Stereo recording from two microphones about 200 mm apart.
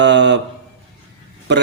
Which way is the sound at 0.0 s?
60° right (ahead or behind).